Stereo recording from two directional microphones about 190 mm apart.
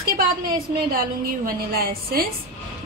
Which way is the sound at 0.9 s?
50° right (ahead or behind).